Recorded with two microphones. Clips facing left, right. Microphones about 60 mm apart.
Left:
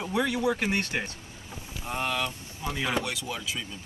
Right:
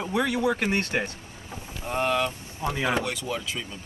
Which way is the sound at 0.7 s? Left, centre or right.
Right.